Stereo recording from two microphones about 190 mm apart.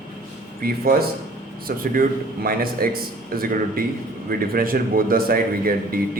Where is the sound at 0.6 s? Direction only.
50° right (ahead or behind).